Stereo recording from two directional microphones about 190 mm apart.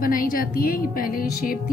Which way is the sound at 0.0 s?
45° left (ahead or behind).